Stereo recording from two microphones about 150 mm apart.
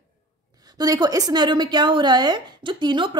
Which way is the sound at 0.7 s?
25° right (ahead or behind).